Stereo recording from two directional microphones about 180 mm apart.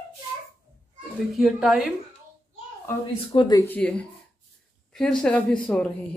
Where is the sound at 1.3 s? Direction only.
Centre (ahead or behind).